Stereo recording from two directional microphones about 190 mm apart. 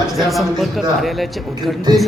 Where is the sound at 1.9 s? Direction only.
20° right (ahead or behind).